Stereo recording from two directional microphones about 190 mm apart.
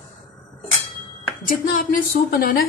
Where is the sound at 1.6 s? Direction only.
50° left (ahead or behind).